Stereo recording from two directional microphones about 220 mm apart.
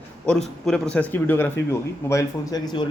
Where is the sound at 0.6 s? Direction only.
5° left (ahead or behind).